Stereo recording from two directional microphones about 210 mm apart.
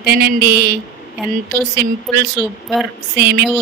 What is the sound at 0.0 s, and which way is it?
Speech, 50° right (ahead or behind).